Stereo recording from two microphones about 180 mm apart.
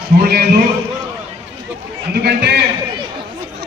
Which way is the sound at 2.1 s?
65° right (ahead or behind).